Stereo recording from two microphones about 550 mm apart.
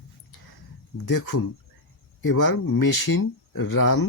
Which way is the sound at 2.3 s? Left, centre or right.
Left.